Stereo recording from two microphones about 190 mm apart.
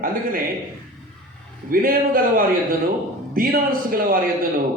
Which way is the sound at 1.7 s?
50° right (ahead or behind).